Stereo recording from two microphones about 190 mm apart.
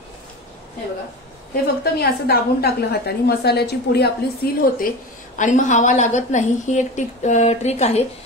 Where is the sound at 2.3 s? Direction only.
55° left (ahead or behind).